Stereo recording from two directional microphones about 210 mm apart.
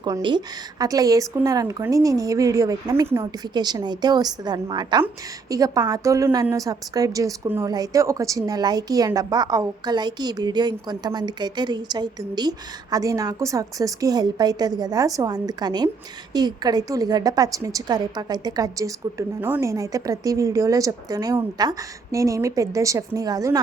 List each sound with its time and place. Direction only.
0.0 s a woman's voice: 20° right (ahead or behind)